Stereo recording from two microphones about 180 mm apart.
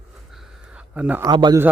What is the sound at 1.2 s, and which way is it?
Speech, 25° right (ahead or behind).